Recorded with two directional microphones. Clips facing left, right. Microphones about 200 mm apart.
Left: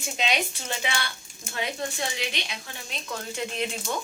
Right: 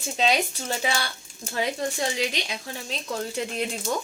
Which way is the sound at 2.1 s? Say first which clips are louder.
Right 5 dB; 40° right (ahead or behind).